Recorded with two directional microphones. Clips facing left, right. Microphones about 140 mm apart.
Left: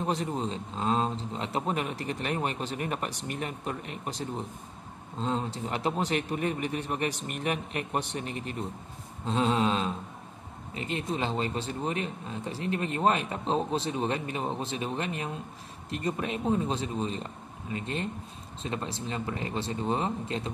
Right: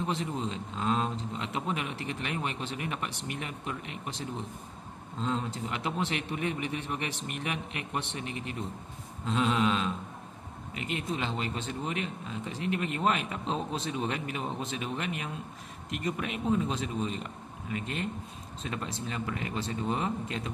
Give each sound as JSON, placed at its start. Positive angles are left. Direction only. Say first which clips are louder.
{"t": 0.0, "sound": "speech", "louder": "left 2 dB", "side_deg": 40}
{"t": 5.2, "sound": "speech", "louder": "left 1 dB", "side_deg": 35}